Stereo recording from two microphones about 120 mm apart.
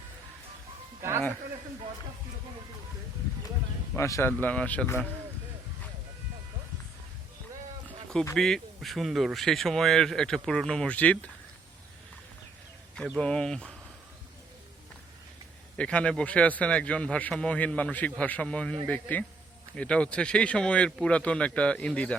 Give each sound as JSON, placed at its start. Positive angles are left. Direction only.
{"t": 3.9, "sound": "a man's voice", "side_deg": 25}
{"t": 8.4, "sound": "speech", "side_deg": 5}
{"t": 13.1, "sound": "a man's voice", "side_deg": 5}
{"t": 15.8, "sound": "a man's voice", "side_deg": 10}